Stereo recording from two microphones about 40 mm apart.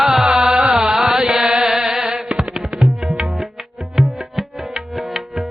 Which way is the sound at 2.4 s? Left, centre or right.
Centre.